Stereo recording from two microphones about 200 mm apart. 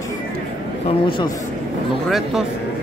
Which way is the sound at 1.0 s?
25° left (ahead or behind).